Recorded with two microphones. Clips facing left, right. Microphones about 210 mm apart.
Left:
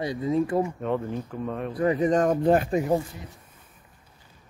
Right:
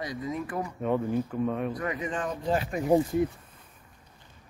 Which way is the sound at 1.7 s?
30° left (ahead or behind).